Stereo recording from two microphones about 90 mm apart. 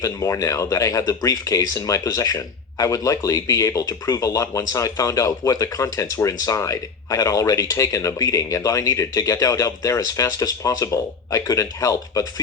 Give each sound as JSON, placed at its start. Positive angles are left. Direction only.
{"t": 0.0, "sound": "speech", "side_deg": 35}